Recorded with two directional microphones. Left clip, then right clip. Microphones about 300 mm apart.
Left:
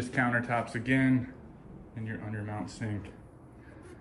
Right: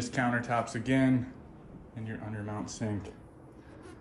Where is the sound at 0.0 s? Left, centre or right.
Centre.